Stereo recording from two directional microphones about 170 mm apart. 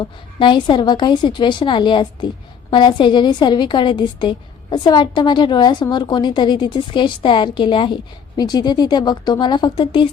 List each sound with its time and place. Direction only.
0.0 s a woman's voice: 30° left (ahead or behind)